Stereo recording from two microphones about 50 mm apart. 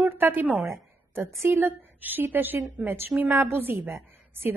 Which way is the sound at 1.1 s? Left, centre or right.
Right.